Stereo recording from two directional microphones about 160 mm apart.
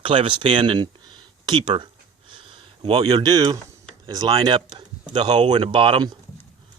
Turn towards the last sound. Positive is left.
turn(degrees=-30)  # may be behind; listen again after turning